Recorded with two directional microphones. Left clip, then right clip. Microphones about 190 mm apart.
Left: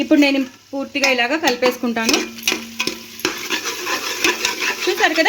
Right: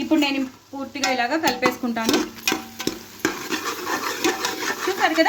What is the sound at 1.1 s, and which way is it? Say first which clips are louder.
Speech: left 4 dB; 45° left (ahead or behind).